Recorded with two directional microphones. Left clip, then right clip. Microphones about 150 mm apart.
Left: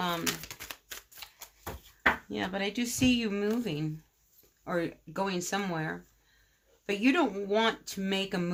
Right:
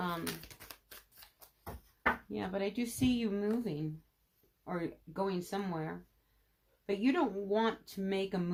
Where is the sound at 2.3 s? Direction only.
20° left (ahead or behind).